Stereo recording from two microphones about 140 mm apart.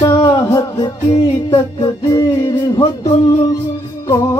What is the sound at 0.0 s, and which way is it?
Music, 30° left (ahead or behind).